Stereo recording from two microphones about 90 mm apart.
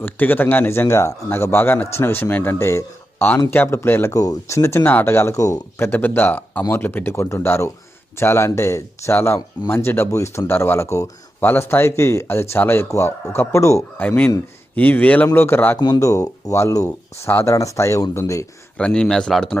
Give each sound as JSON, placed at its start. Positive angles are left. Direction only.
{"t": 0.0, "sound": "a man's voice", "side_deg": 20}
{"t": 4.1, "sound": "speech", "side_deg": 40}
{"t": 5.8, "sound": "a man's voice", "side_deg": 20}
{"t": 14.8, "sound": "a man's voice", "side_deg": 20}
{"t": 16.0, "sound": "speech", "side_deg": 35}
{"t": 18.8, "sound": "speech", "side_deg": 10}